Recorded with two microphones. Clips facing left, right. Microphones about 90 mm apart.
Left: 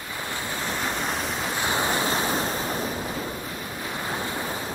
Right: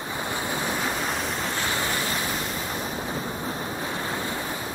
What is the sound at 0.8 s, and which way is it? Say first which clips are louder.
Waves: even; centre (ahead or behind).